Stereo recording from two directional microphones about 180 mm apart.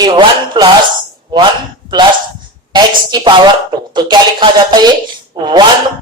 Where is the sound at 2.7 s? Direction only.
25° right (ahead or behind).